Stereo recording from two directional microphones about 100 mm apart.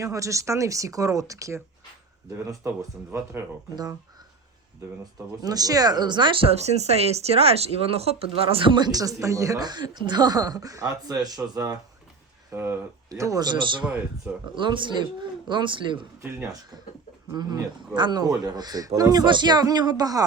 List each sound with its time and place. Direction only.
0.0 s speech: 30° right (ahead or behind)
5.4 s speech: 40° right (ahead or behind)
6.5 s speech: 90° right; by 8.7 s 70° right (ahead or behind)
8.7 s speech: 45° right (ahead or behind)
12.5 s speech: 25° right (ahead or behind)
13.4 s speech: 50° right (ahead or behind)
17.3 s speech: 45° right (ahead or behind)